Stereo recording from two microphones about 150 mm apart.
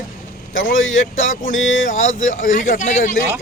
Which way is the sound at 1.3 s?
60° left (ahead or behind).